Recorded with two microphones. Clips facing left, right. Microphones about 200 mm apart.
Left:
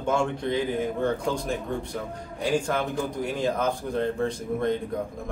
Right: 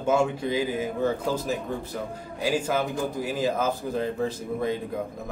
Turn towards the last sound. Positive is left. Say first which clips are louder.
# left 1 dB
turn(degrees=-5)  # may be behind; listen again after turning